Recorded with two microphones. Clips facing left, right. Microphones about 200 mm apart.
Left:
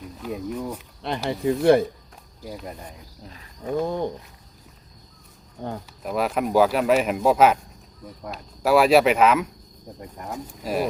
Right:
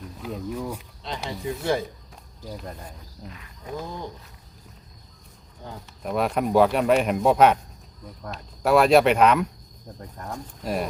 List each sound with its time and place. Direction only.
0.0 s speech: centre (ahead or behind)
1.0 s speech: 60° left (ahead or behind)
3.2 s speech: 35° left (ahead or behind)
3.8 s speech: 55° left (ahead or behind)
6.0 s speech: centre (ahead or behind)